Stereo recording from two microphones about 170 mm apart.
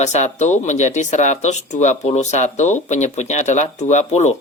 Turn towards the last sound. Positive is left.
turn(degrees=40)  # may be behind; listen again after turning